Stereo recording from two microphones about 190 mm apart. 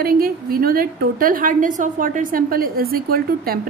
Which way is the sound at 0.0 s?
50° right (ahead or behind).